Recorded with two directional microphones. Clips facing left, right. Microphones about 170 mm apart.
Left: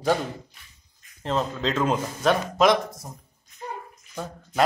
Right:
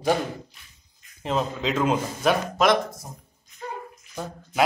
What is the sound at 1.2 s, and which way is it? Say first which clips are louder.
Speech: even; 10° right (ahead or behind).